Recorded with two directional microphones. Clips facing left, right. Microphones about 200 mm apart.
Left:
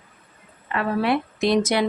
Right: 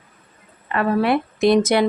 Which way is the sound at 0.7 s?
50° right (ahead or behind).